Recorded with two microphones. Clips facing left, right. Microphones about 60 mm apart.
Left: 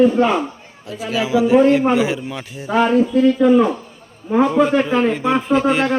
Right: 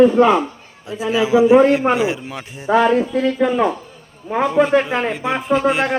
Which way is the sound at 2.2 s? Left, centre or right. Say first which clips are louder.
Left 2 dB; right.